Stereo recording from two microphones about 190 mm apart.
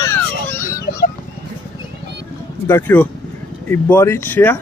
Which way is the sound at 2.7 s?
10° left (ahead or behind).